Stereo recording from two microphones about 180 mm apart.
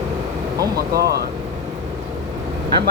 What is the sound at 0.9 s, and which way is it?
Speech, 65° right (ahead or behind).